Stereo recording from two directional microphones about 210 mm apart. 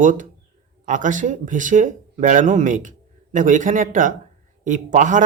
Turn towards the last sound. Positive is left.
turn(degrees=-35)  # may be behind; listen again after turning